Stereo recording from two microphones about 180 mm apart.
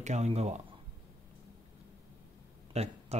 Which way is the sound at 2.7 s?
35° right (ahead or behind).